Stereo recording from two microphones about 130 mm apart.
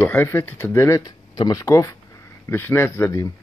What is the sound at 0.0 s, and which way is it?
Speech, 15° left (ahead or behind).